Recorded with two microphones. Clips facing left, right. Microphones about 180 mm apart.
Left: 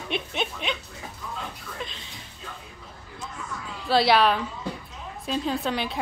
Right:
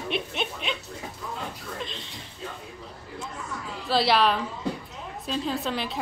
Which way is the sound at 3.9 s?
Centre (ahead or behind).